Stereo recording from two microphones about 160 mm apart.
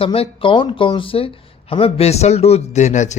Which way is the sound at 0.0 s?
35° left (ahead or behind).